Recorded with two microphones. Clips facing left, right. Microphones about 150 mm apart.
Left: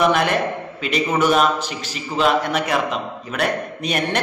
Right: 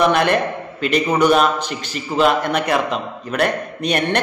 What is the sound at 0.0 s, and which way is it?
A man's voice, centre (ahead or behind).